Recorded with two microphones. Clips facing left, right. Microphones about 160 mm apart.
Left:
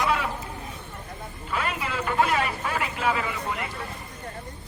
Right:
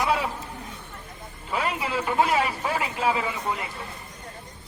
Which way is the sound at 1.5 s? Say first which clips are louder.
Right 2 dB; 20° right (ahead or behind).